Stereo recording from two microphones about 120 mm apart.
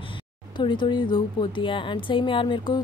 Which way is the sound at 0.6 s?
40° left (ahead or behind).